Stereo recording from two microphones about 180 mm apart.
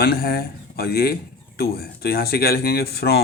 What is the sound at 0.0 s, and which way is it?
Speech, 60° left (ahead or behind).